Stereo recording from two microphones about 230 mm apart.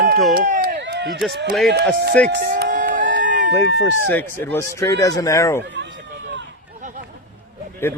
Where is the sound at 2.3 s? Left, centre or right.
Right.